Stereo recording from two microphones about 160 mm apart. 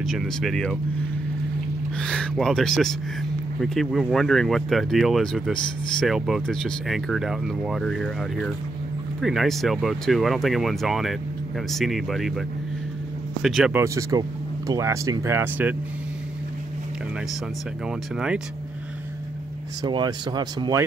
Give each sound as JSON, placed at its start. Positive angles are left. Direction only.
{"t": 0.0, "sound": "speech", "side_deg": 0}
{"t": 2.0, "sound": "speech", "side_deg": 5}
{"t": 13.7, "sound": "speech", "side_deg": -20}
{"t": 19.8, "sound": "speech", "side_deg": -25}